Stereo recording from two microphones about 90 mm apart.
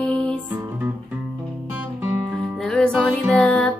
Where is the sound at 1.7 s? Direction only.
20° right (ahead or behind).